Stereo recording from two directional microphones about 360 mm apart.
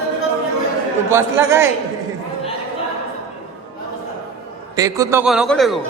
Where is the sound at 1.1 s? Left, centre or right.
Centre.